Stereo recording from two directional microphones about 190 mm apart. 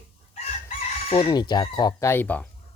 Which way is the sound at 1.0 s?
30° left (ahead or behind).